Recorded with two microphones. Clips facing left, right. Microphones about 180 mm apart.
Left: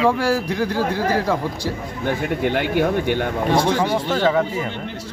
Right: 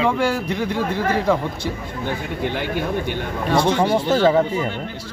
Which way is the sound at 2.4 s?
60° left (ahead or behind).